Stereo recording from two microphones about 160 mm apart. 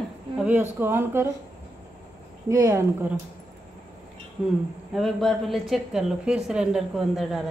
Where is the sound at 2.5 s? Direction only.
20° right (ahead or behind).